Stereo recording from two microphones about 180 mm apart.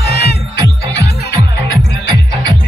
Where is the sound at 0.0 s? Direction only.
65° left (ahead or behind).